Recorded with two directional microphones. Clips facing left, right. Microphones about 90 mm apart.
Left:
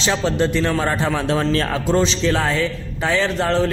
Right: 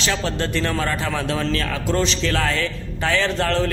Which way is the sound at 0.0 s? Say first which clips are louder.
Left 4 dB; 20° left (ahead or behind).